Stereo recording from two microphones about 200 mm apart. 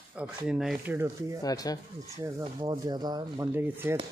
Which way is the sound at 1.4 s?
20° left (ahead or behind).